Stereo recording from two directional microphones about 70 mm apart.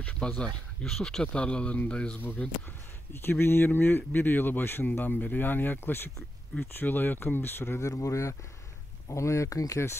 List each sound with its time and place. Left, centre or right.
0.0 s a sound: centre
0.9 s speech: centre
3.1 s speech: left
7.8 s speech: left